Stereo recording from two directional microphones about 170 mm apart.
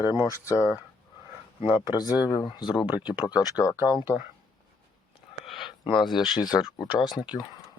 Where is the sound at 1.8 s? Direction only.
25° left (ahead or behind).